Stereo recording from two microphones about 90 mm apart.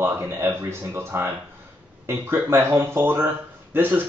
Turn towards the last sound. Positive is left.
turn(degrees=-20)  # may be behind; listen again after turning